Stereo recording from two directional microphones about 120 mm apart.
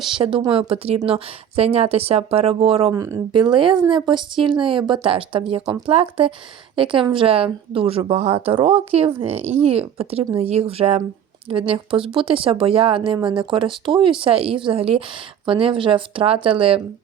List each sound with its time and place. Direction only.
0.1 s speech: 45° right (ahead or behind)
2.9 s speech: 25° right (ahead or behind)
3.3 s speech: 40° right (ahead or behind)